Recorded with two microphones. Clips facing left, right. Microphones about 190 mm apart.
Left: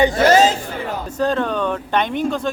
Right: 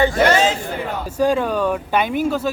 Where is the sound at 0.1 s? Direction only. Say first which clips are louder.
Left 2 dB; 40° left (ahead or behind).